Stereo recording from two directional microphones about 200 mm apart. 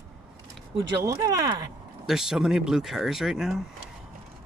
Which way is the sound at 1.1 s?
20° right (ahead or behind).